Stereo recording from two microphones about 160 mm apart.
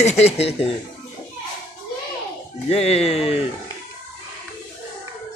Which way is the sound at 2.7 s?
40° left (ahead or behind).